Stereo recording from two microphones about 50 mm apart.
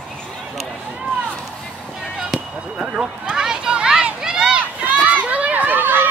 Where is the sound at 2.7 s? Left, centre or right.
Right.